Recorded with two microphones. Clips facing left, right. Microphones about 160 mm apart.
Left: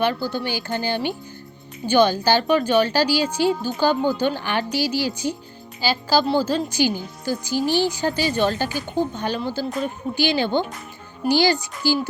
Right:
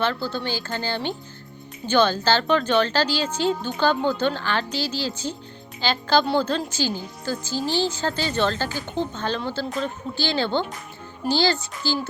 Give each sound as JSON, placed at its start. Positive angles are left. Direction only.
{"t": 0.0, "sound": "a woman's voice", "side_deg": 15}